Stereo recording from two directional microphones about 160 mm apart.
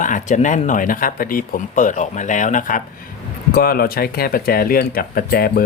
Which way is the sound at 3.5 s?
70° left (ahead or behind).